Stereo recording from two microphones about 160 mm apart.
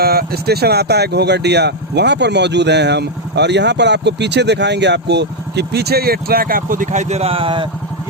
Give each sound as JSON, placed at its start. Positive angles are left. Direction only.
{"t": 0.0, "sound": "speech", "side_deg": -70}